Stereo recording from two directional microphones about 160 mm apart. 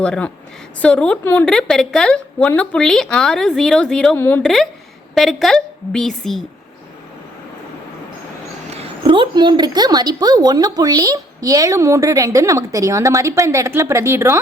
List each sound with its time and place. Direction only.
0.0 s a woman's voice: 5° left (ahead or behind)
8.8 s a woman's voice: 35° right (ahead or behind); by 14.3 s 15° right (ahead or behind)